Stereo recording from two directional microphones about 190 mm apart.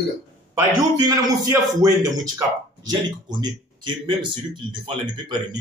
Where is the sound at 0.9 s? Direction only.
20° right (ahead or behind).